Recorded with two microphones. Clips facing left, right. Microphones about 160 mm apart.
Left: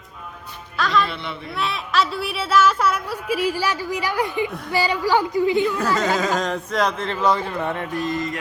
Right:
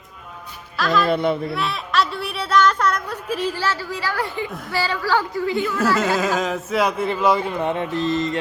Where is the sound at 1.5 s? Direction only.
Centre (ahead or behind); by 4.5 s 15° left (ahead or behind).